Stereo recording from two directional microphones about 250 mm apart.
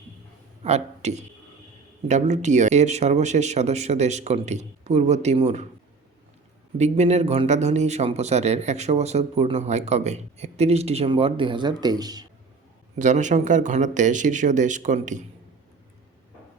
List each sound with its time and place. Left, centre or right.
0.6 s a man's voice: right
6.7 s a man's voice: right
13.0 s a man's voice: right